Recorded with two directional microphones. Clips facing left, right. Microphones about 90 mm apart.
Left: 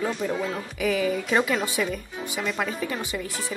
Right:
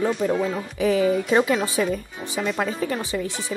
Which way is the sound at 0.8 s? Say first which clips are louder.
Right 5 dB; 30° right (ahead or behind).